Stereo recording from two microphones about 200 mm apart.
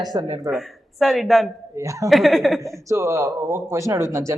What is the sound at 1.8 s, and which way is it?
Speech, 15° right (ahead or behind).